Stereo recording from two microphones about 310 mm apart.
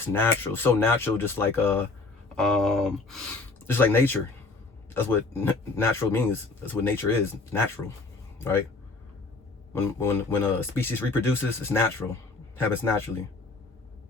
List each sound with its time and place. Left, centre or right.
0.0 s speech: centre
10.0 s speech: centre